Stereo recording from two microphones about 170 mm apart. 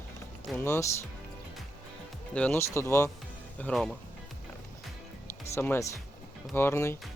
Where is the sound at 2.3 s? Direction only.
10° left (ahead or behind).